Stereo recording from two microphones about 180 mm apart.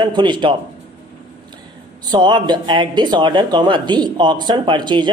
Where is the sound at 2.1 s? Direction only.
25° right (ahead or behind).